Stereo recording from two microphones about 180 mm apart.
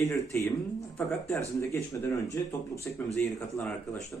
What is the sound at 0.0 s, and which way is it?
Speech, 15° left (ahead or behind).